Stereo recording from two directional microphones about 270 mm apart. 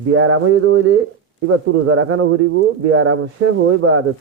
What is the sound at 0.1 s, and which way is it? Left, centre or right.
Speech, right.